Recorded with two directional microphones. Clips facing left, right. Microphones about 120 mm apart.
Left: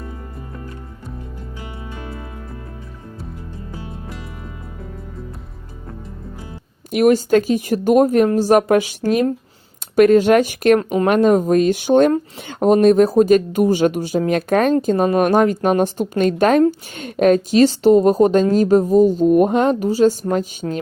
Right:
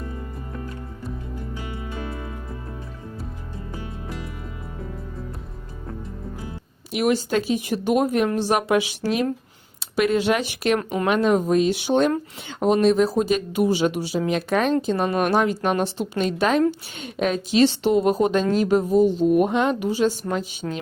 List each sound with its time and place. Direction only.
6.9 s speech: 45° left (ahead or behind)